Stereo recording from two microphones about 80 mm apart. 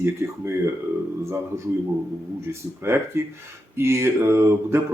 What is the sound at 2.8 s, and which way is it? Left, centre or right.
Speech, right.